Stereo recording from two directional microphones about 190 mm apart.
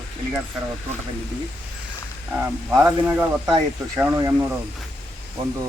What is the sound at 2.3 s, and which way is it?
Speech, 10° right (ahead or behind).